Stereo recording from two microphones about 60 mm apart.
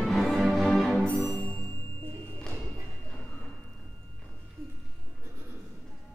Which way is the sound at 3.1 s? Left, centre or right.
Left.